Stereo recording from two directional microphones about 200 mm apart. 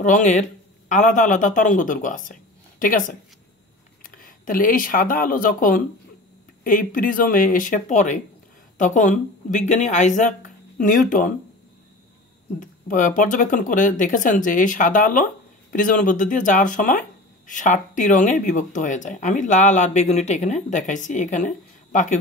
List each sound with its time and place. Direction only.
0.0 s speech: 40° left (ahead or behind)
12.5 s speech: 40° left (ahead or behind)